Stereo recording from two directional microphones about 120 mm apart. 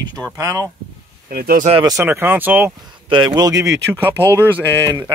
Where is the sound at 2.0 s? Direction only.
20° right (ahead or behind).